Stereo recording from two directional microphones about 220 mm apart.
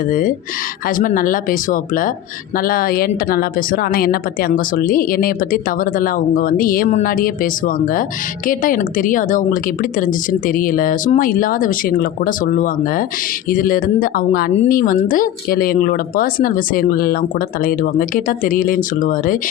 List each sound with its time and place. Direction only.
0.1 s speech: 40° left (ahead or behind)